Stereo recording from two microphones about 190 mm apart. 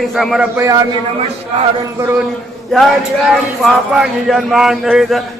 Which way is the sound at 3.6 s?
Centre (ahead or behind).